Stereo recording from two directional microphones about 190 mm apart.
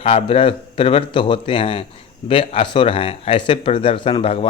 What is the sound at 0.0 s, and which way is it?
Speech, 30° left (ahead or behind).